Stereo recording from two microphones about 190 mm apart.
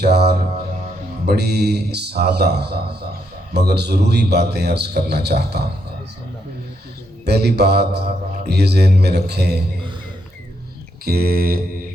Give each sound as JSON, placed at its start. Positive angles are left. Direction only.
{"t": 0.0, "sound": "mantra", "side_deg": -60}
{"t": 7.3, "sound": "mantra", "side_deg": -60}
{"t": 11.0, "sound": "a sound", "side_deg": -55}